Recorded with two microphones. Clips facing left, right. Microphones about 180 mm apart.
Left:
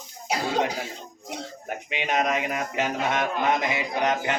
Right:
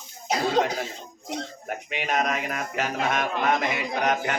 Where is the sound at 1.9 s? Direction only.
20° left (ahead or behind).